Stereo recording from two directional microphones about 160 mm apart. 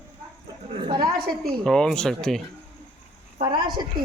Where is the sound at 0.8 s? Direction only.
25° right (ahead or behind).